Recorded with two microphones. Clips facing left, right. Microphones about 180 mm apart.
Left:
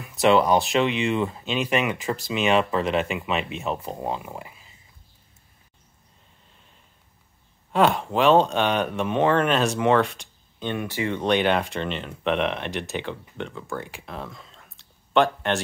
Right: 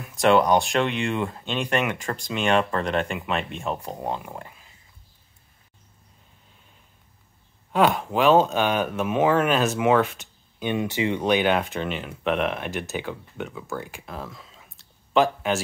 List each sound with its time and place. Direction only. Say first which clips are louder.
0.0 s speech: even; centre (ahead or behind)
7.7 s speech: even; centre (ahead or behind)
10.8 s speech: right 3 dB; 20° right (ahead or behind)
11.2 s speech: left 1 dB; 5° right (ahead or behind)